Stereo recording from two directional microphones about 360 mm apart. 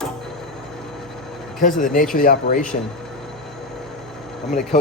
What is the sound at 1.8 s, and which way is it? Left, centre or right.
Speech, left.